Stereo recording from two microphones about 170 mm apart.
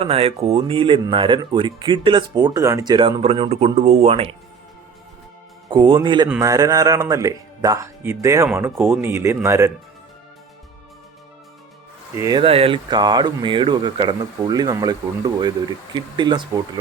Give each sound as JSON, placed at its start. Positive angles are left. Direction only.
{"t": 0.0, "sound": "speech", "side_deg": -35}
{"t": 5.6, "sound": "speech", "side_deg": -30}
{"t": 12.1, "sound": "speech", "side_deg": -20}
{"t": 12.4, "sound": "speech", "side_deg": -35}